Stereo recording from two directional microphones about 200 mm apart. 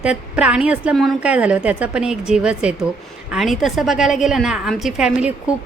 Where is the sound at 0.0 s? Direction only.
5° right (ahead or behind).